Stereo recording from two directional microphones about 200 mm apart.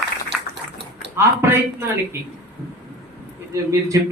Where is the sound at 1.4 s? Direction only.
10° right (ahead or behind).